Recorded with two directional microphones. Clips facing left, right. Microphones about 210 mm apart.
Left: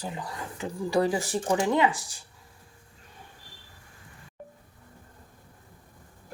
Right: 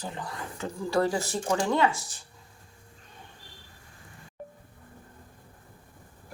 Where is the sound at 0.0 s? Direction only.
10° left (ahead or behind).